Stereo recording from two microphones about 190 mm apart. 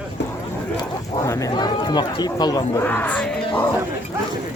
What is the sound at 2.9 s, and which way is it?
Speech, 10° left (ahead or behind).